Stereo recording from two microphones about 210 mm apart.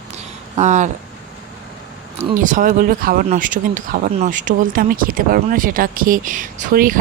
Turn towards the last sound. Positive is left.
turn(degrees=-40)  # may be behind; listen again after turning